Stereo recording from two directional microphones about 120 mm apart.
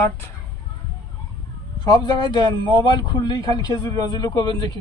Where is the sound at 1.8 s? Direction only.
35° left (ahead or behind).